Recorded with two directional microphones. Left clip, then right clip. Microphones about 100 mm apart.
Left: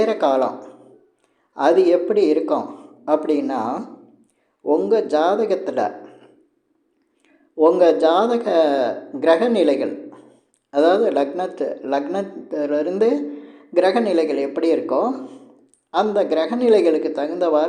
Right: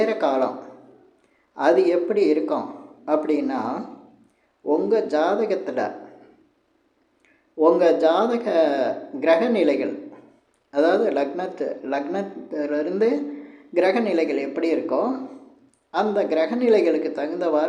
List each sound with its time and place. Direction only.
0.0 s speech: 25° left (ahead or behind)
1.5 s a man's voice: 25° left (ahead or behind)
7.6 s a man's voice: 20° left (ahead or behind)